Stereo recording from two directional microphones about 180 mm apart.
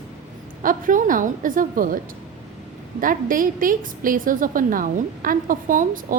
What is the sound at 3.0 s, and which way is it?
A woman's voice, 50° right (ahead or behind).